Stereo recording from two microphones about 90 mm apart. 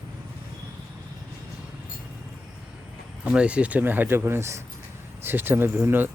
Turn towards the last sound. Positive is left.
turn(degrees=-20)  # may be behind; listen again after turning